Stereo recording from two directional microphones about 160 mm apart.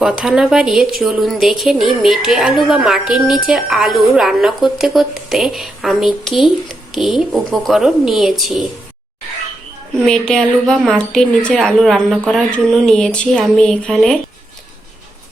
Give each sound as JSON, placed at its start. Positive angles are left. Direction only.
{"t": 0.0, "sound": "a woman's voice", "side_deg": -5}
{"t": 10.1, "sound": "a woman's voice", "side_deg": 5}